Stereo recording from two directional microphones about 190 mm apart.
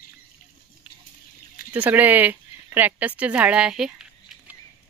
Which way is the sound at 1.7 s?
10° right (ahead or behind).